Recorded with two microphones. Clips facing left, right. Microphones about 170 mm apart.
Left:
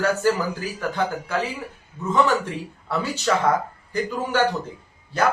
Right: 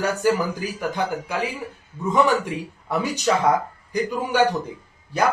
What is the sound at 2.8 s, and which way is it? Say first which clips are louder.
A man's voice: right 1 dB; 15° right (ahead or behind).